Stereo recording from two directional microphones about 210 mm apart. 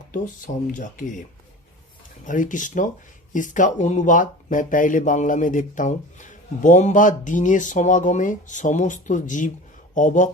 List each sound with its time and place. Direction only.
0.1 s speech: 40° left (ahead or behind)
2.2 s speech: 40° left (ahead or behind)